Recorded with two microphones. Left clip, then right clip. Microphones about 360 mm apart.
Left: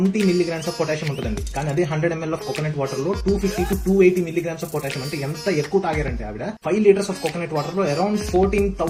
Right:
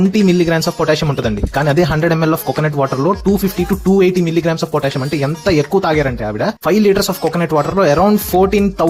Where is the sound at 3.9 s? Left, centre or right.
Right.